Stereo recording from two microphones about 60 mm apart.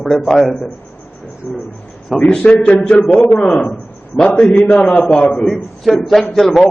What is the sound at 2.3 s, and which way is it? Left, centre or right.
A man's voice, centre.